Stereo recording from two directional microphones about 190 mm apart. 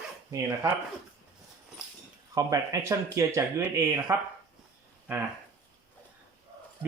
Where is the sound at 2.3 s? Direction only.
15° right (ahead or behind).